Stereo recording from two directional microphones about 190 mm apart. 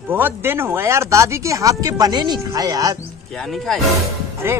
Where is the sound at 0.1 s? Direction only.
10° right (ahead or behind).